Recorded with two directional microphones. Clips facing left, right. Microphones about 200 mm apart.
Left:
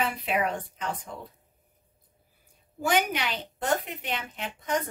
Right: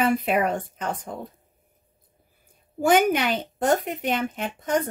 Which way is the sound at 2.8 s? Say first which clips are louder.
Right 7 dB; 50° right (ahead or behind).